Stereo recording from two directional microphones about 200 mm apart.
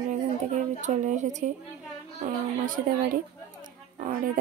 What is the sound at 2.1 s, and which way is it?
A woman's voice, 40° right (ahead or behind).